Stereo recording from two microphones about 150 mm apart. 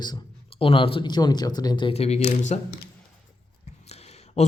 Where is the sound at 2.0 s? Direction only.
45° left (ahead or behind).